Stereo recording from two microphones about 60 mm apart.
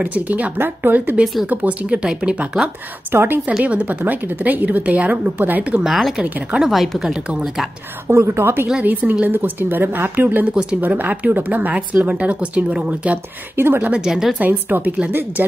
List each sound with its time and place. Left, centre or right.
0.0 s speech: right
1.2 s speech: centre
1.5 s speech: right
3.1 s a woman's voice: right
5.9 s speech: centre
6.2 s speech: right
6.6 s speech: centre
8.1 s a woman's voice: right
8.8 s speech: right
14.0 s speech: centre
14.4 s speech: right